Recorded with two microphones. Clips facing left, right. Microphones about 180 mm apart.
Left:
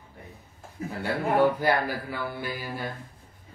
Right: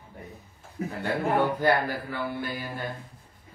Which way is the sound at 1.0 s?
10° left (ahead or behind).